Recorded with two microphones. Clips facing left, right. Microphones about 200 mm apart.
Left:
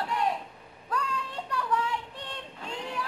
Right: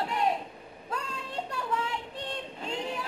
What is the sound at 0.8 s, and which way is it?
Child singing, 25° right (ahead or behind).